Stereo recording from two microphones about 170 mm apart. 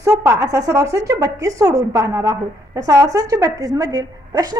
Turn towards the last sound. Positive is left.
turn(degrees=-20)  # may be behind; listen again after turning